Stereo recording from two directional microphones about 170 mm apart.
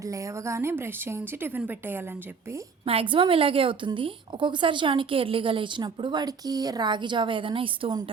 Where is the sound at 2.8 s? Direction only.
35° right (ahead or behind).